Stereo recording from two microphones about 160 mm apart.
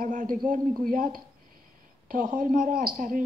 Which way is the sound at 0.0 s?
60° right (ahead or behind).